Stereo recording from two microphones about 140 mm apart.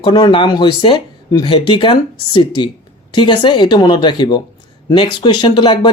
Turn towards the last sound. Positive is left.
turn(degrees=35)  # may be behind; listen again after turning